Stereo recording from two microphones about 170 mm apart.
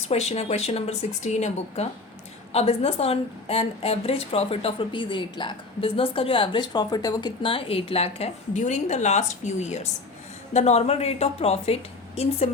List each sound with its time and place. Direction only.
0.1 s a woman's voice: 40° left (ahead or behind)